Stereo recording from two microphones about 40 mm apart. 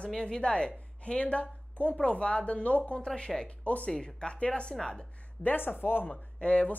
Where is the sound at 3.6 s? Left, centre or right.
Left.